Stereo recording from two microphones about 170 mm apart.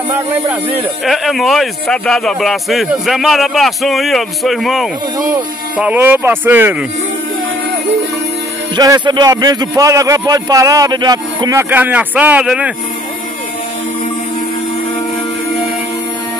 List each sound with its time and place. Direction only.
0.1 s speech: 10° right (ahead or behind)
1.0 s speech: centre (ahead or behind)
5.8 s speech: 10° right (ahead or behind)
8.7 s a man's voice: 25° right (ahead or behind)
11.7 s speech: 10° right (ahead or behind)